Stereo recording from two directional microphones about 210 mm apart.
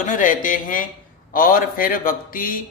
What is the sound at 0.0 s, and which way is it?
Speech, 40° left (ahead or behind).